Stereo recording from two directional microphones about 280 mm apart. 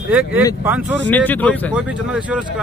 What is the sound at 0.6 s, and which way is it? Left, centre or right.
Speech, centre.